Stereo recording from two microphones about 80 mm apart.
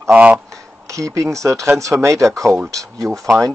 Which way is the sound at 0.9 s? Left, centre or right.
Right.